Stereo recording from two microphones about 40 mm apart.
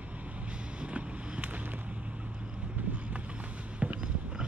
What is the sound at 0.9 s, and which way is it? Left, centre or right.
Vehicle, right.